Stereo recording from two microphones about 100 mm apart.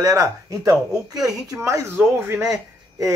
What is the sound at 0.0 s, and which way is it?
A man's voice, 35° right (ahead or behind).